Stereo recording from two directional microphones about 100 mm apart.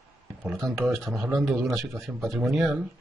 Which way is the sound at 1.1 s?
Centre (ahead or behind).